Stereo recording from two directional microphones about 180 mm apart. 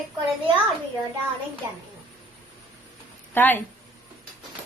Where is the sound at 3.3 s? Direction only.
10° left (ahead or behind).